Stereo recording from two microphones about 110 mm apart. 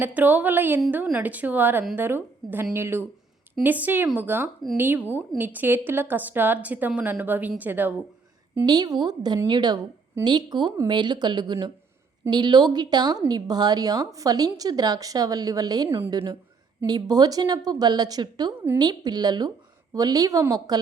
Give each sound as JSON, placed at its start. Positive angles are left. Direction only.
{"t": 0.0, "sound": "a woman's voice", "side_deg": -15}
{"t": 8.6, "sound": "speech", "side_deg": -35}